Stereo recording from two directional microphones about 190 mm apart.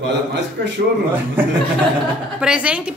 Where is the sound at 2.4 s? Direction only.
5° right (ahead or behind).